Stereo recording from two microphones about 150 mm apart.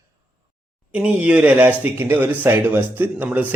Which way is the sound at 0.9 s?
10° right (ahead or behind).